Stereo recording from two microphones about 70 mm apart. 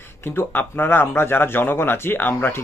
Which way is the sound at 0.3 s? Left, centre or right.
Left.